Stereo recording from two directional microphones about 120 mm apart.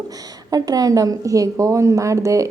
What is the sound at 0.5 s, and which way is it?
A woman's voice, 30° right (ahead or behind).